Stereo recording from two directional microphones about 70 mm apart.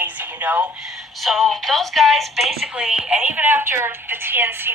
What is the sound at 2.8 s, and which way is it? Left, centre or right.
Speech, centre.